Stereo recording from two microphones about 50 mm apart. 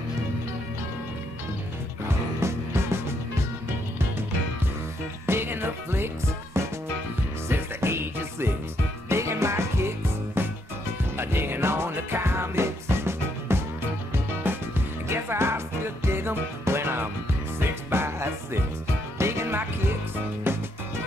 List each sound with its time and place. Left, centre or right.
2.4 s music: right
5.2 s music: right
7.4 s music: right
9.1 s music: right
15.0 s music: right
20.5 s music: right